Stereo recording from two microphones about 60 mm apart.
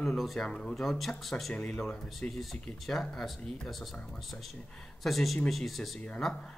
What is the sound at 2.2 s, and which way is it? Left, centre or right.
Speech, centre.